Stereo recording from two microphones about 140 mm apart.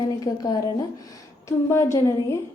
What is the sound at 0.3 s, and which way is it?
A woman's voice, 30° left (ahead or behind).